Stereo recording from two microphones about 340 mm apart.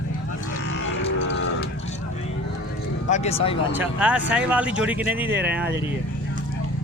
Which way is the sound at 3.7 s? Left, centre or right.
Centre.